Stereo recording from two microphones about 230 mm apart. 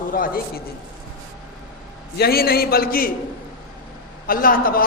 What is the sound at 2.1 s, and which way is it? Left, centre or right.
Speech, left.